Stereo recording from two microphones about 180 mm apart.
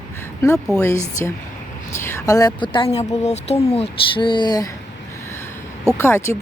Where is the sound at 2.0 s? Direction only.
20° left (ahead or behind).